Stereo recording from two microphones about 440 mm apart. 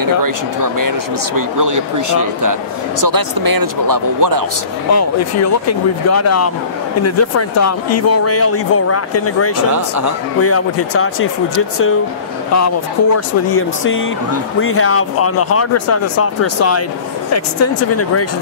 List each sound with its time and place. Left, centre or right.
0.7 s speech: right
4.9 s speech: left
9.7 s speech: right
10.4 s speech: left
12.5 s speech: left